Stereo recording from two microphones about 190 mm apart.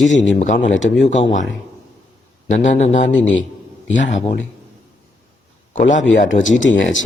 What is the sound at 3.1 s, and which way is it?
Speech, 80° left.